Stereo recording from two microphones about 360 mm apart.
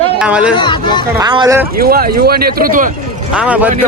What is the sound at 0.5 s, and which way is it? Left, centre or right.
Speech, centre.